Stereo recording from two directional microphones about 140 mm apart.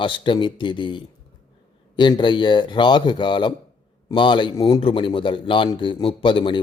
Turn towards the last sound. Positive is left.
turn(degrees=35)  # may be behind; listen again after turning